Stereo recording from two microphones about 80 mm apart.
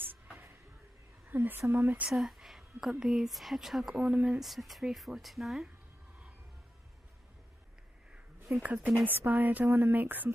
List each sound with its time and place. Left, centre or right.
0.0 s a sound: right
1.3 s speech: right
2.0 s a woman's voice: centre
4.4 s a woman's voice: centre
8.6 s speech: centre